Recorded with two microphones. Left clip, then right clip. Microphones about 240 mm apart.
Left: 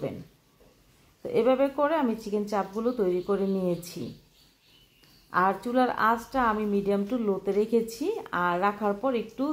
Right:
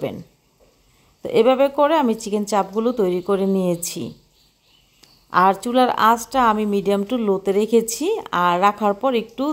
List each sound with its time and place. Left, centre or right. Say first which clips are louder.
1.2 s a woman's voice: right 8 dB; right
5.3 s a woman's voice: right 9 dB; right